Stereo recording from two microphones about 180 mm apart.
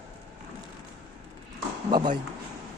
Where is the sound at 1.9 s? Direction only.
25° right (ahead or behind).